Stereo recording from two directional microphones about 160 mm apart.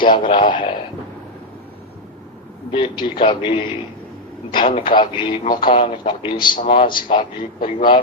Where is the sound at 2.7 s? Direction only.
30° left (ahead or behind).